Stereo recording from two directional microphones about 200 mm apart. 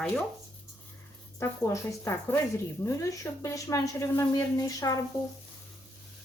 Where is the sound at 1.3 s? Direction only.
15° left (ahead or behind).